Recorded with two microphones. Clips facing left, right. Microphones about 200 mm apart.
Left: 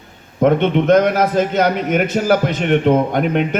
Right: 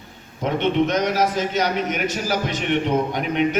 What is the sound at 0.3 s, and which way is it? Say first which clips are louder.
A man's voice: left 6 dB; 55° left (ahead or behind).